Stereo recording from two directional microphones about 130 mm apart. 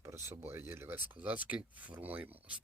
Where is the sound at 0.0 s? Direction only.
20° right (ahead or behind).